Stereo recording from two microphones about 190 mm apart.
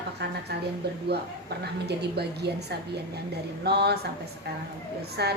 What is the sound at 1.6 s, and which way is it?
Speech, 60° right (ahead or behind).